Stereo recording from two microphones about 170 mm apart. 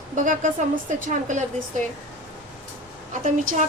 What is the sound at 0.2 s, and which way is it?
A woman's voice, 50° right (ahead or behind).